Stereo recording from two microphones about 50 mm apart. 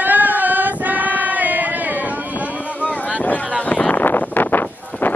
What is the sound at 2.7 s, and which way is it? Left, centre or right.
Boat, left.